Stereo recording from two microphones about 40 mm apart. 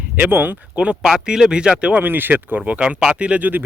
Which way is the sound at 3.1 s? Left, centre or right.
Right.